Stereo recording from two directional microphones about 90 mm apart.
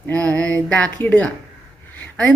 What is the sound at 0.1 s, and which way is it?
A woman's voice, 15° left (ahead or behind).